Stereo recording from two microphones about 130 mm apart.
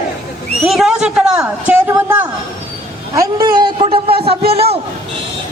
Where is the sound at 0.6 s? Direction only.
Centre (ahead or behind).